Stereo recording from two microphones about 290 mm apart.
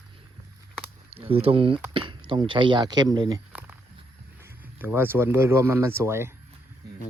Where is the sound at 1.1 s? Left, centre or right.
Centre.